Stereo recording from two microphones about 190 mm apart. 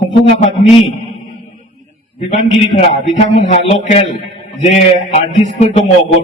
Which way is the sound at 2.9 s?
40° left (ahead or behind).